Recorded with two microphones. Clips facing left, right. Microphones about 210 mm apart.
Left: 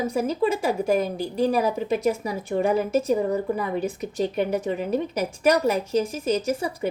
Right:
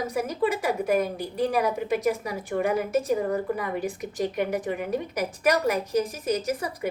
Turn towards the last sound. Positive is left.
turn(degrees=25)  # may be behind; listen again after turning